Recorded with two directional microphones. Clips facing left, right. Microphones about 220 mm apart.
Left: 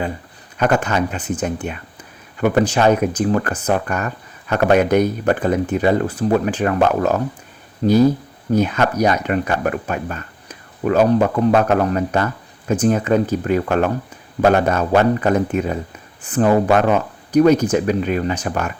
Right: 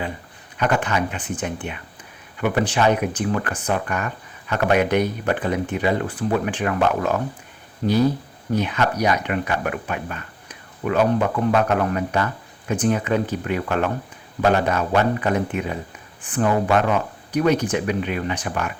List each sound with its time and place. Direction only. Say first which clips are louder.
0.5 s speech: left 4 dB; 40° left (ahead or behind)
8.5 s speech: left 5 dB; 45° left (ahead or behind)